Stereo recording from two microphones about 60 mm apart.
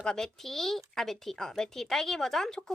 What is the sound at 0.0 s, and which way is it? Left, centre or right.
Speech, centre.